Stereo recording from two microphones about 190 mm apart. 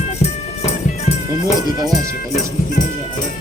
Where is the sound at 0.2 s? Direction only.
35° left (ahead or behind).